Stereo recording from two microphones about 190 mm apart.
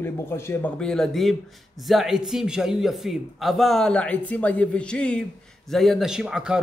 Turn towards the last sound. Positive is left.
turn(degrees=-5)  # may be behind; listen again after turning